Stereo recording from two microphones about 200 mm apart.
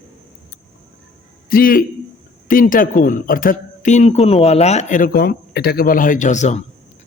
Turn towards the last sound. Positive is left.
turn(degrees=35)  # may be behind; listen again after turning